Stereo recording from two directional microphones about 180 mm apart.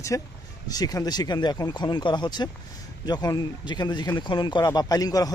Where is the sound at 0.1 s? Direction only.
15° left (ahead or behind).